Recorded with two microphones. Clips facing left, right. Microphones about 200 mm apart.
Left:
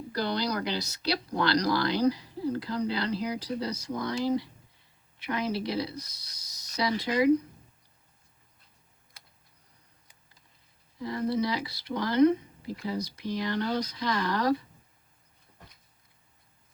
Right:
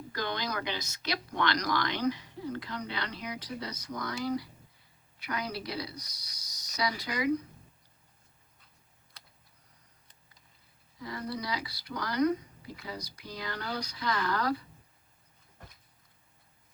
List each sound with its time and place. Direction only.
0.8 s speech: 35° left (ahead or behind)
11.0 s speech: 25° left (ahead or behind)